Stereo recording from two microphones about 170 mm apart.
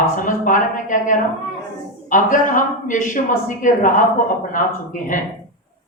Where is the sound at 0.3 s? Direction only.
50° left (ahead or behind).